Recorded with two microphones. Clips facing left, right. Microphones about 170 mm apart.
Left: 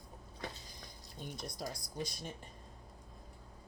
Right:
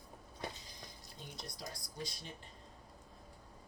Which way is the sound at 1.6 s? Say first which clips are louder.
Left 6 dB; 50° left (ahead or behind).